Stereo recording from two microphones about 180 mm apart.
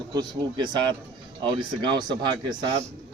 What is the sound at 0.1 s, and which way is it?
A man's voice, 25° right (ahead or behind).